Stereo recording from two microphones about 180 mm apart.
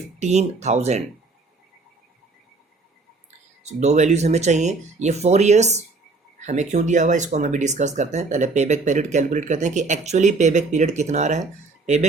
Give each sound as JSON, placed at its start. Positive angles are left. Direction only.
{"t": 0.2, "sound": "speech", "side_deg": -40}
{"t": 3.6, "sound": "speech", "side_deg": -40}